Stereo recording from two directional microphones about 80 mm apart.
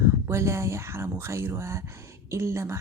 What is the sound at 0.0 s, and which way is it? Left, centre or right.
Speech, right.